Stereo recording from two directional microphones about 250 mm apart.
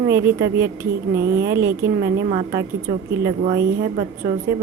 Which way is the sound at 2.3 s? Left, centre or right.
Right.